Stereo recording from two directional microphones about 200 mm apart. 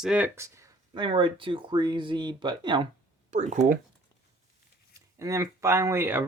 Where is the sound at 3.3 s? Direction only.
35° right (ahead or behind).